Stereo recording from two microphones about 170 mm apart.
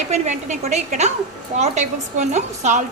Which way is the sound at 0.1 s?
45° right (ahead or behind).